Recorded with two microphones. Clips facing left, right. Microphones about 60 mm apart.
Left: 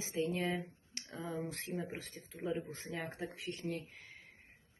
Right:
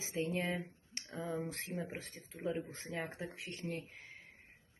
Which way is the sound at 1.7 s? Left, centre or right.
Centre.